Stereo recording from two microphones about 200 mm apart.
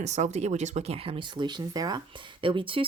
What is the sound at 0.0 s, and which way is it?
Speech, 35° right (ahead or behind).